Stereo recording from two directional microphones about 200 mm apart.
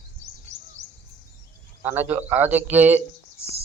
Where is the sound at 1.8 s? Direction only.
10° right (ahead or behind).